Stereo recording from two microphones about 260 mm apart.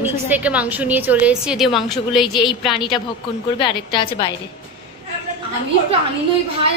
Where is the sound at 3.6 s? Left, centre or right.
Centre.